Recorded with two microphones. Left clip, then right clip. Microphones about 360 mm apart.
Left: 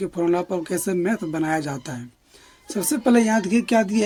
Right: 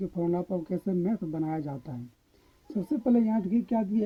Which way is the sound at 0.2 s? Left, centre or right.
Right.